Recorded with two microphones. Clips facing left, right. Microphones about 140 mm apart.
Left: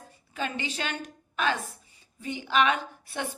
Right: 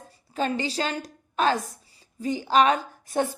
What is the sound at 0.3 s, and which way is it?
A woman's voice, 35° right (ahead or behind).